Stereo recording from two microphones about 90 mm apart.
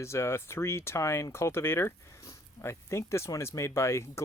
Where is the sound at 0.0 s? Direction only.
30° left (ahead or behind).